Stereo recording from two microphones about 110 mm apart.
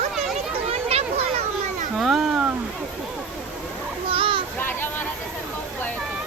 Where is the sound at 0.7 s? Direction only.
65° right (ahead or behind).